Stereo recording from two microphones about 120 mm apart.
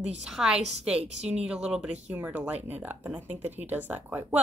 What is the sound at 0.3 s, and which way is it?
A woman's voice, 5° right (ahead or behind).